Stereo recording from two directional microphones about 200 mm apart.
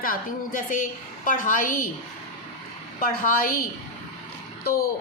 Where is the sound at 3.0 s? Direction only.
45° left (ahead or behind).